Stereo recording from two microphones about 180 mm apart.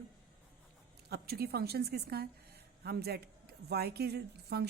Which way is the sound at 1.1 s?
60° right (ahead or behind).